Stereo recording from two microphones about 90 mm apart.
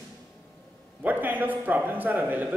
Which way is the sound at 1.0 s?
20° right (ahead or behind).